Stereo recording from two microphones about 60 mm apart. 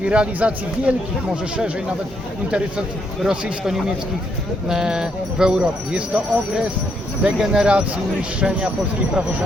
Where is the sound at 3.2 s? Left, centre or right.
Centre.